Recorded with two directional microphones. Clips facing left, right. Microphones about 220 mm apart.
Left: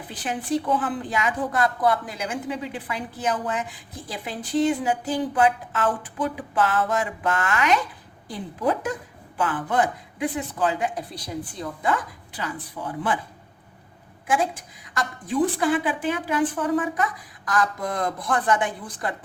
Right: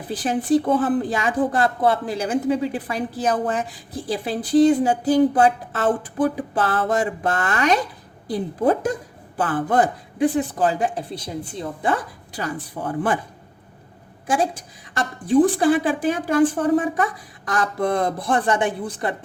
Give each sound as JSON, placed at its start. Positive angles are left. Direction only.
{"t": 0.1, "sound": "speech", "side_deg": -35}
{"t": 12.4, "sound": "speech", "side_deg": -45}
{"t": 14.9, "sound": "speech", "side_deg": -30}
{"t": 16.7, "sound": "speech", "side_deg": -30}